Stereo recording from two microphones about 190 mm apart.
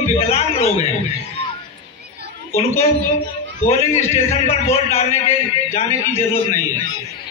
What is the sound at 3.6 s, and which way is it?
Speech, 35° left (ahead or behind).